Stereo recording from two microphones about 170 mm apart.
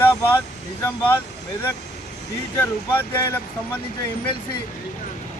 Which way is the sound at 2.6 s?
15° left (ahead or behind).